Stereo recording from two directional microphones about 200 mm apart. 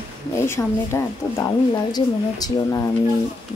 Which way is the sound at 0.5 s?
10° left (ahead or behind).